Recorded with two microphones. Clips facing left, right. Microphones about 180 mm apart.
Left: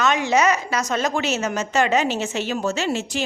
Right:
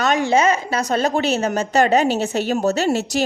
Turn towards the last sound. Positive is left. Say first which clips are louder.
# right 5 dB
turn(degrees=-40)  # may be behind; listen again after turning